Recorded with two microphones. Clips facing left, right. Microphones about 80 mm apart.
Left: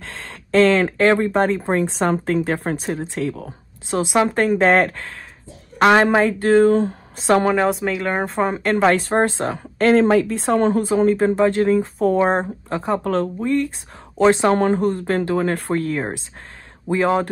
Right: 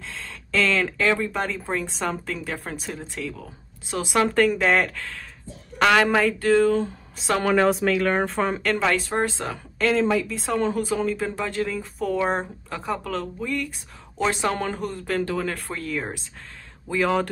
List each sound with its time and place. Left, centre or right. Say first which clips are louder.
0.0 s speech: left 3 dB; left
4.0 s speech: left 2 dB; left
7.8 s speech: even; centre